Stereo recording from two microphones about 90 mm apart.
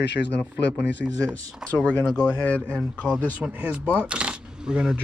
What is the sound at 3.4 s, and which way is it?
Speech, 15° right (ahead or behind).